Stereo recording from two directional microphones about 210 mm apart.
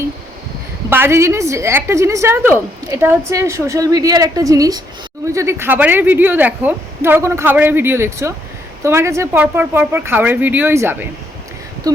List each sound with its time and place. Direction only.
0.9 s speech: 10° right (ahead or behind)